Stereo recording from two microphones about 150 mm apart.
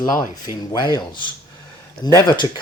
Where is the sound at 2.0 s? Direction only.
30° left (ahead or behind).